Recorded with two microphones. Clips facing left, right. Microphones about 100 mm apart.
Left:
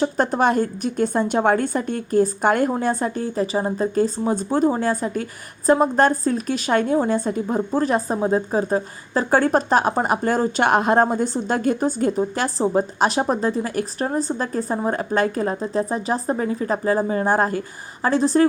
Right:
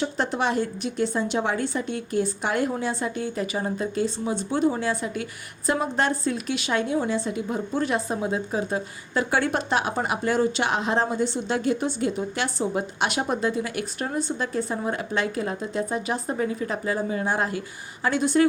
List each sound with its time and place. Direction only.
0.0 s a woman's voice: 45° left (ahead or behind)